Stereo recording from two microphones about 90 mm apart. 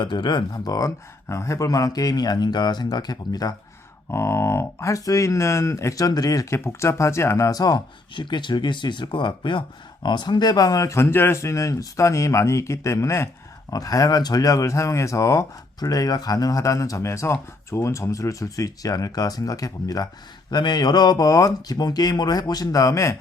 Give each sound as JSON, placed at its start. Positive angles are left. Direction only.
{"t": 0.0, "sound": "speech", "side_deg": 60}
{"t": 4.1, "sound": "speech", "side_deg": 30}
{"t": 8.1, "sound": "speech", "side_deg": 60}
{"t": 20.5, "sound": "speech", "side_deg": 55}